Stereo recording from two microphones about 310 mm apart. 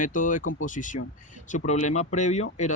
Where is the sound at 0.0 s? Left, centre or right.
Left.